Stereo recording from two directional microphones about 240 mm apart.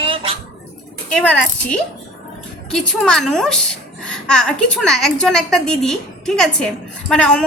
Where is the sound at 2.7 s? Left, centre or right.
Centre.